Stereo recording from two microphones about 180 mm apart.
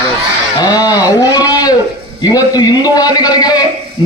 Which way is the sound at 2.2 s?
20° left (ahead or behind).